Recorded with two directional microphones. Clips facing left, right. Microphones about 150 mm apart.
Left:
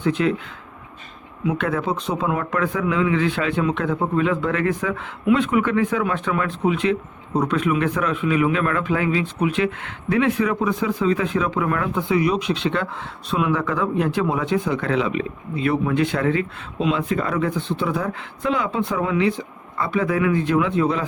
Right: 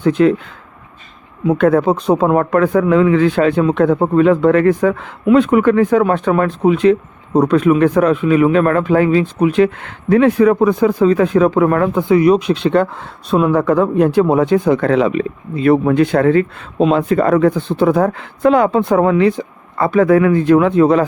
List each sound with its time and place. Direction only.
0.0 s speech: 40° right (ahead or behind)
1.5 s speech: 40° right (ahead or behind)
19.7 s speech: 55° right (ahead or behind)